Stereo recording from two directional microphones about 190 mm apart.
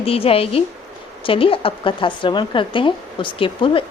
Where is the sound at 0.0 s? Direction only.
30° left (ahead or behind).